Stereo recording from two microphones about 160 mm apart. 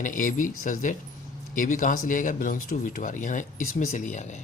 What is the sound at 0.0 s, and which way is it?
Speech, 55° left (ahead or behind).